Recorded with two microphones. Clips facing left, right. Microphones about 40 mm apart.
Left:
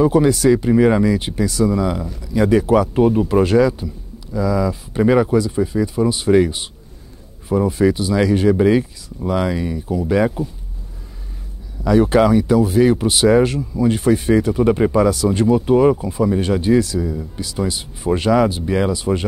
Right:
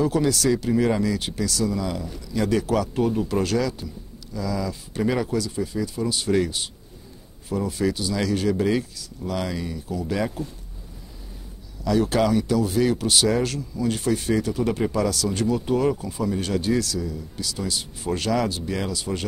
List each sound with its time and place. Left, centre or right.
0.0 s speech: left
11.8 s speech: left